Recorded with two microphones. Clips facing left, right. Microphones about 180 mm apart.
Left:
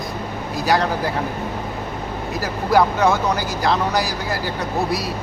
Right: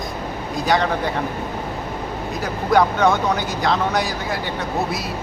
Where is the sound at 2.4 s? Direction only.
Centre (ahead or behind).